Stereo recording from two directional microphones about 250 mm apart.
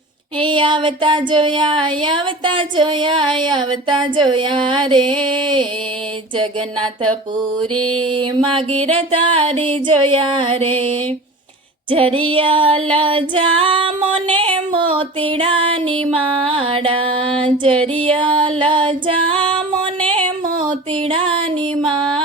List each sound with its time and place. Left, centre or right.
0.3 s child singing: centre
7.9 s child singing: right
16.0 s female singing: right
20.6 s music: centre